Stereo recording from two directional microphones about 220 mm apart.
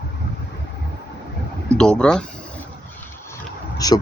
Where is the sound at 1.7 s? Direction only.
5° left (ahead or behind).